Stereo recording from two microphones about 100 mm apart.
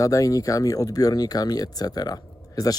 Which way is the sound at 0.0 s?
35° left (ahead or behind).